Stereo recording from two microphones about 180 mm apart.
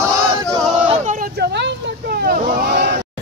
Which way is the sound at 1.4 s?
65° right (ahead or behind).